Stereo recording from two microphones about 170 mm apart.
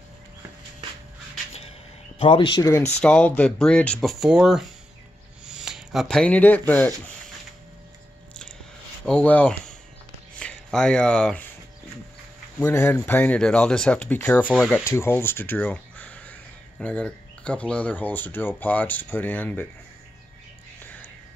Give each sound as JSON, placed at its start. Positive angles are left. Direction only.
{"t": 2.1, "sound": "speech", "side_deg": 30}
{"t": 3.0, "sound": "speech", "side_deg": 5}
{"t": 9.0, "sound": "speech", "side_deg": 5}
{"t": 12.5, "sound": "speech", "side_deg": 15}
{"t": 20.8, "sound": "whispering", "side_deg": 10}